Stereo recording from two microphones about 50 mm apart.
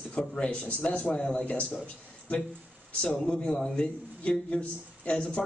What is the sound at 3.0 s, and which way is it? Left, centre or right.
A man's voice, centre.